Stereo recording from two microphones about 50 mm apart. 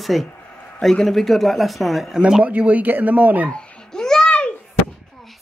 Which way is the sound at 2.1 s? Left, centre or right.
Centre.